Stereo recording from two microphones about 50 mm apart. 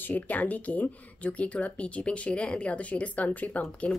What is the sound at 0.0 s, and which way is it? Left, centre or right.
Speech, left.